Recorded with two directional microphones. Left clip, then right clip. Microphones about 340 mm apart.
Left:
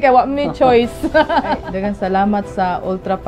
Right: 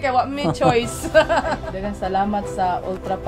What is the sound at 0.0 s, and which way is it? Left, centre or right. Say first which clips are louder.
A woman's voice: left 7 dB; left.